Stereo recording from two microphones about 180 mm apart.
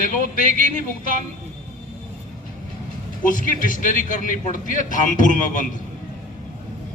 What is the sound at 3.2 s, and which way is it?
A man's voice, 50° left (ahead or behind).